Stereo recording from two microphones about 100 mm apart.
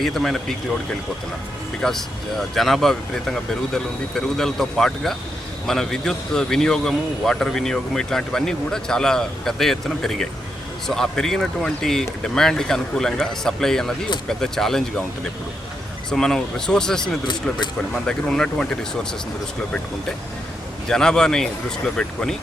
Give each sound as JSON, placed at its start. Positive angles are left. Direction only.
{"t": 0.0, "sound": "a man's voice", "side_deg": 5}
{"t": 1.8, "sound": "a man's voice", "side_deg": 5}
{"t": 20.8, "sound": "speech", "side_deg": 5}